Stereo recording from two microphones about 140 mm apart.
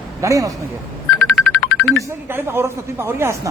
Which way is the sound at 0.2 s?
25° right (ahead or behind).